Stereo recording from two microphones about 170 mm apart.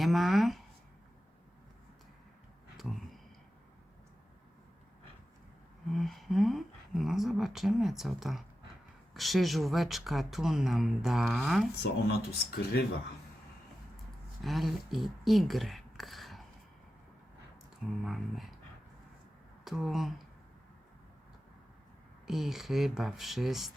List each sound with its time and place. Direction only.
0.0 s a sound: centre (ahead or behind)
2.7 s a sound: centre (ahead or behind)
5.9 s speech: centre (ahead or behind)
11.8 s speech: 65° left (ahead or behind)
14.4 s speech: centre (ahead or behind)
18.0 s speech: centre (ahead or behind)
19.6 s speech: centre (ahead or behind)
22.3 s speech: centre (ahead or behind)